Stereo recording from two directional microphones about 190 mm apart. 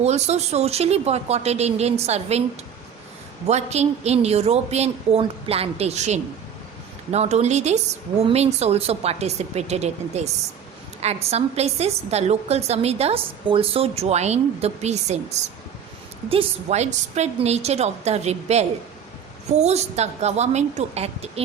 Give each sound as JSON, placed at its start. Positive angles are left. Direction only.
{"t": 0.0, "sound": "a woman's voice", "side_deg": -35}
{"t": 3.4, "sound": "a woman's voice", "side_deg": -35}